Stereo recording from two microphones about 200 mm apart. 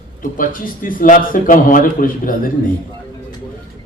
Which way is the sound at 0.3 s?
45° left (ahead or behind).